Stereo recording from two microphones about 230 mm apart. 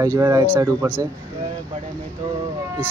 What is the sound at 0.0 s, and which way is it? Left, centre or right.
Speech, centre.